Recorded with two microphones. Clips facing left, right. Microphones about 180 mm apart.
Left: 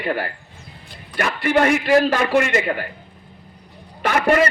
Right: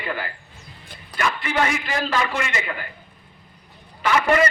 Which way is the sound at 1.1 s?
60° left (ahead or behind).